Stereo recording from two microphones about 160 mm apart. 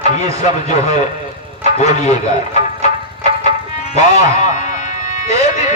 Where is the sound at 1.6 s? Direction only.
45° left (ahead or behind).